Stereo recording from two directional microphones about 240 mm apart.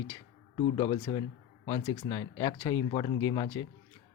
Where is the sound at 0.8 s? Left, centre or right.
Centre.